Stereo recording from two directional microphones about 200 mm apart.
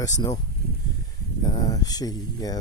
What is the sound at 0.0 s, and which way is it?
Speech, 20° left (ahead or behind).